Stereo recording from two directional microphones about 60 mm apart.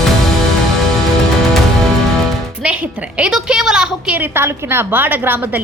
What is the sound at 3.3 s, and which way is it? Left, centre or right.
Speech, centre.